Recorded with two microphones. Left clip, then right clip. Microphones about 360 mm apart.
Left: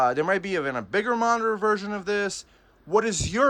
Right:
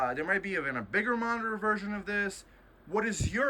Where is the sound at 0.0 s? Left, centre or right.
Centre.